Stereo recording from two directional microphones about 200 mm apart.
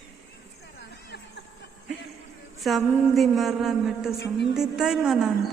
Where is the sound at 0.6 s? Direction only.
55° left (ahead or behind).